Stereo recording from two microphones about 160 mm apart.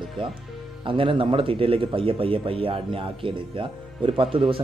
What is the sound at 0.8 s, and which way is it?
Speech, 35° right (ahead or behind).